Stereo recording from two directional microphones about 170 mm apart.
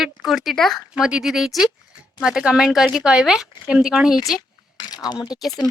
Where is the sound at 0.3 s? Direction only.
Centre (ahead or behind).